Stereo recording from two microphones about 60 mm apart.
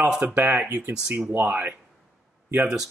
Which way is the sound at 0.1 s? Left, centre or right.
Centre.